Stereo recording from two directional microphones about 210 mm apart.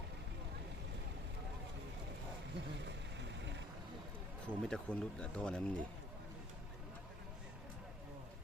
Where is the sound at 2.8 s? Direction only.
55° right (ahead or behind).